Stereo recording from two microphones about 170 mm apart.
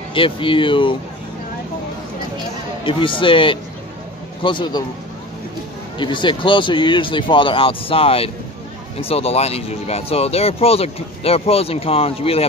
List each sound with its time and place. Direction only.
0.1 s speech: 30° left (ahead or behind)
2.8 s speech: 30° left (ahead or behind)
5.9 s speech: 30° left (ahead or behind)